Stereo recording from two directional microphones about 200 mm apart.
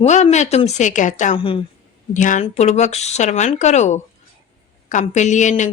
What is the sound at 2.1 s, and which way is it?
Speech, 40° left (ahead or behind).